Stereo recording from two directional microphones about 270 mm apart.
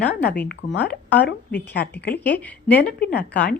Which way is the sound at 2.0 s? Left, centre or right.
Left.